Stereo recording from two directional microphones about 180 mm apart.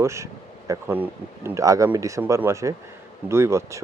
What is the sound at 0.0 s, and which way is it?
Speech, 15° right (ahead or behind).